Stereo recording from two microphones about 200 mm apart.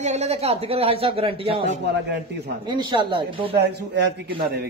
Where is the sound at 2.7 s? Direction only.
20° right (ahead or behind).